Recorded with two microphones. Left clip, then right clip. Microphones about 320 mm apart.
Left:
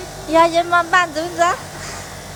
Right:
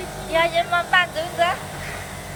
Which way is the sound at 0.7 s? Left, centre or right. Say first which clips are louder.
Left 4 dB; centre.